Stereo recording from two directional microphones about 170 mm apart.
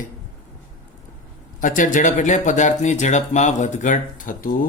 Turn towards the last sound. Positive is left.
turn(degrees=55)  # may be behind; listen again after turning